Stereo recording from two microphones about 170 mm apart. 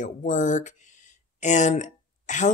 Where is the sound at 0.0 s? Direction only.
45° left (ahead or behind).